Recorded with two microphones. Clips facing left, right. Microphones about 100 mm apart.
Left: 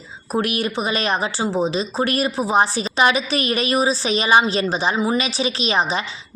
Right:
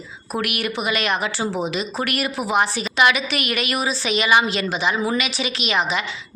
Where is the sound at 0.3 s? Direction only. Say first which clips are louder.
Left 3 dB; 30° left (ahead or behind).